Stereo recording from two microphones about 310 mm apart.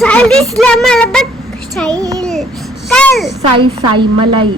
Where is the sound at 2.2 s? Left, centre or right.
Centre.